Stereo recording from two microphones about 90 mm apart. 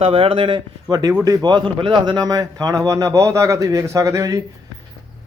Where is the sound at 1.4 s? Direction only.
65° right (ahead or behind); by 4.4 s 35° right (ahead or behind).